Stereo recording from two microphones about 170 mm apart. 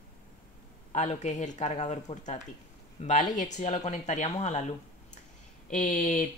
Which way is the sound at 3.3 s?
45° left (ahead or behind).